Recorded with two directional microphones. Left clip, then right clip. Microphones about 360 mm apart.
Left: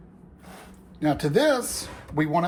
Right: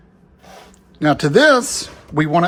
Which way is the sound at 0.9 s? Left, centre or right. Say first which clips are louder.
Right 9 dB; centre.